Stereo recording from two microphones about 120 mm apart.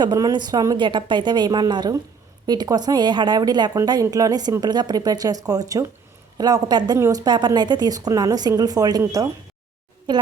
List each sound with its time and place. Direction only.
0.0 s a woman's voice: 35° right (ahead or behind)
7.3 s a woman's voice: 35° right (ahead or behind)